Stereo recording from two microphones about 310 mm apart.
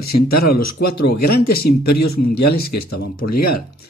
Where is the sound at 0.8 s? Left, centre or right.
Left.